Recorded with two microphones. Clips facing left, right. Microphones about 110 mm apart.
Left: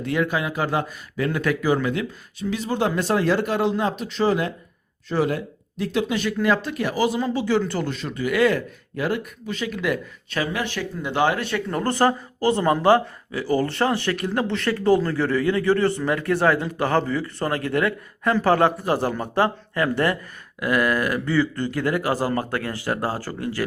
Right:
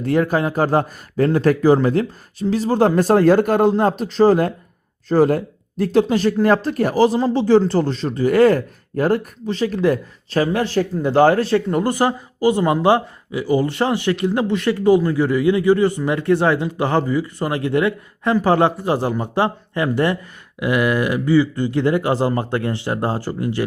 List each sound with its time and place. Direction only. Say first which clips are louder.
0.0 s speech: right 6 dB; 40° right (ahead or behind)
11.7 s speech: right 2 dB; 15° right (ahead or behind)